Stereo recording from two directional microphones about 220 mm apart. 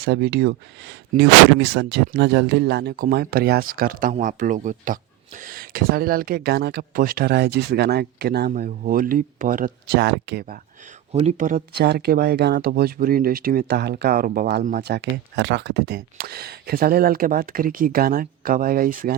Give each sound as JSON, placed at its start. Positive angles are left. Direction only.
{"t": 0.0, "sound": "speech", "side_deg": -45}
{"t": 11.1, "sound": "speech", "side_deg": -30}